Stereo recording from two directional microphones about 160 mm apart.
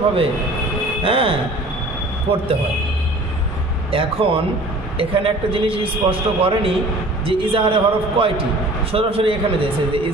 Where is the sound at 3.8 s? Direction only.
35° right (ahead or behind).